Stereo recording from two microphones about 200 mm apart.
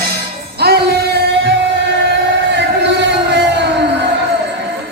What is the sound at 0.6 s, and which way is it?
Music, 55° right (ahead or behind).